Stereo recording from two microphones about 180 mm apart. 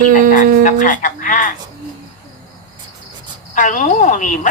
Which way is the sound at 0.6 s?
45° left (ahead or behind).